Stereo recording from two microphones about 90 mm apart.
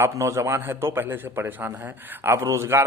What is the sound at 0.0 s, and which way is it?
A man's voice, 30° right (ahead or behind).